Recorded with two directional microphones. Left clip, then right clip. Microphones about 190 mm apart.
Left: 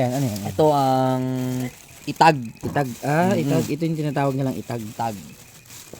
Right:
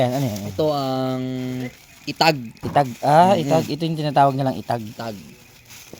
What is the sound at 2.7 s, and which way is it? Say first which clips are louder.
Speech: right 7 dB; centre (ahead or behind).